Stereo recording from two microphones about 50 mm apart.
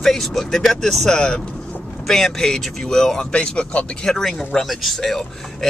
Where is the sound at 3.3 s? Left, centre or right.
Left.